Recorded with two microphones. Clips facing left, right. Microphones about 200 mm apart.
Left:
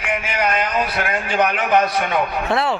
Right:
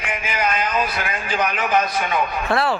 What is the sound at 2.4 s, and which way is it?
Speech, 20° left (ahead or behind).